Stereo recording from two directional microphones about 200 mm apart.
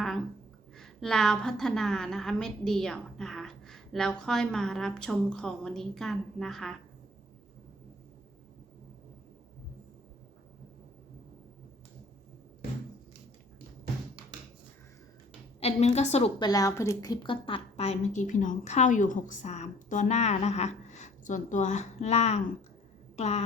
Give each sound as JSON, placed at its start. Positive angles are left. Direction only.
{"t": 0.8, "sound": "a woman's voice", "side_deg": 0}
{"t": 15.6, "sound": "a woman's voice", "side_deg": 35}
{"t": 16.4, "sound": "a woman's voice", "side_deg": 20}